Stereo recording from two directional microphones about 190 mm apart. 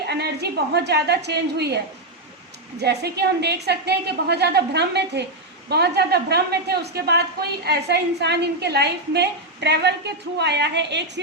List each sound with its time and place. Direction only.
0.1 s a woman's voice: 60° right (ahead or behind)